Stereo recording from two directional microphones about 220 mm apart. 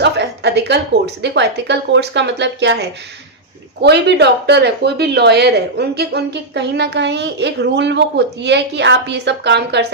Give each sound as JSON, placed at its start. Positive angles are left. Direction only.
{"t": 0.0, "sound": "speech", "side_deg": -50}